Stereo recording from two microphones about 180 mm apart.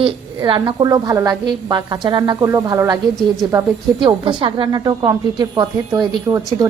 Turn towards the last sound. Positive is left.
turn(degrees=-15)  # may be behind; listen again after turning